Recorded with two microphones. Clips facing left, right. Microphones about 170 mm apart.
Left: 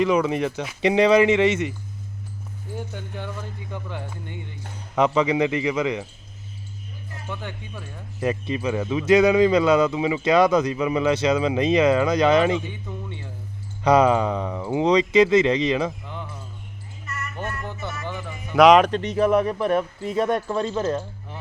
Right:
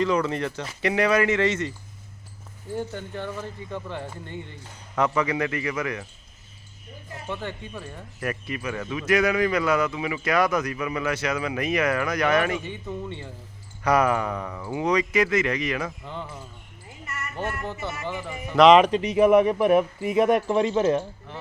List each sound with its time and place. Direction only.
0.0 s speech: 15° left (ahead or behind)
2.7 s speech: centre (ahead or behind)
4.9 s speech: 20° left (ahead or behind)
7.3 s speech: centre (ahead or behind)
8.2 s speech: 25° left (ahead or behind)
12.6 s speech: centre (ahead or behind)
13.8 s speech: 20° left (ahead or behind)
17.3 s speech: 5° right (ahead or behind)